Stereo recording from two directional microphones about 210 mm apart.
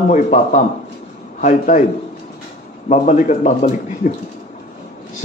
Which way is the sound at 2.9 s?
35° left (ahead or behind).